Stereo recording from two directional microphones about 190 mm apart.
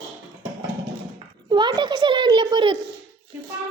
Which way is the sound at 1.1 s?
25° right (ahead or behind).